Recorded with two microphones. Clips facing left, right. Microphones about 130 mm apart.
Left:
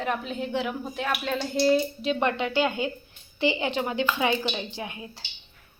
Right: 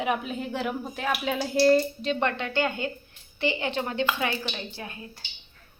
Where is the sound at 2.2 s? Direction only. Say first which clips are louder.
Left 3 dB; 20° left (ahead or behind).